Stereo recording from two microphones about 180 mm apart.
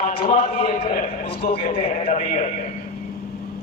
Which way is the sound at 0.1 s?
30° left (ahead or behind).